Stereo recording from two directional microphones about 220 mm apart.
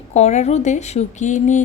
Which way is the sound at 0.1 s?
30° left (ahead or behind).